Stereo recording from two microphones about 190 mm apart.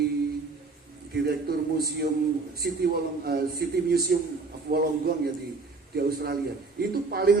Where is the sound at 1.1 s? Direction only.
55° right (ahead or behind).